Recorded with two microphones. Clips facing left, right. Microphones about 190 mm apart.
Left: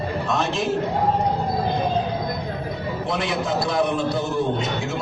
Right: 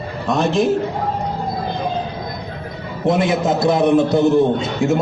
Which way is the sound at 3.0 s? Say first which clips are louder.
Right 10 dB; 50° right (ahead or behind).